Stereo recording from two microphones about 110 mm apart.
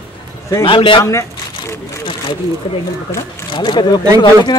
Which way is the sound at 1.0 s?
30° left (ahead or behind).